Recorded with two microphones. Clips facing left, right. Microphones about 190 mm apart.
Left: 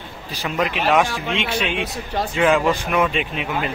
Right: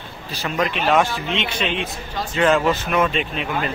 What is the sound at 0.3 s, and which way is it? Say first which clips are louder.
Speech: even; 15° left (ahead or behind).